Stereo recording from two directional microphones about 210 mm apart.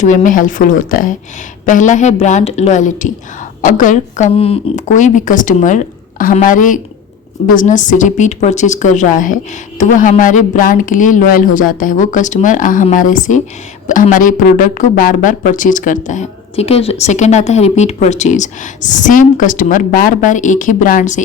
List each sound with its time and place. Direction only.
0.0 s speech: 35° left (ahead or behind)